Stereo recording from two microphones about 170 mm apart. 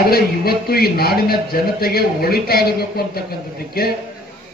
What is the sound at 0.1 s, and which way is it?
Speech, 65° left (ahead or behind).